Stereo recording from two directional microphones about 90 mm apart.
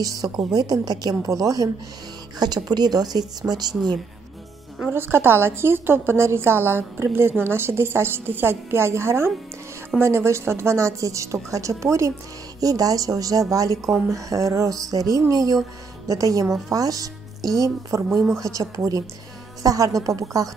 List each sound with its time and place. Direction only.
0.0 s a woman's voice: 40° right (ahead or behind)
4.9 s a woman's voice: 25° right (ahead or behind)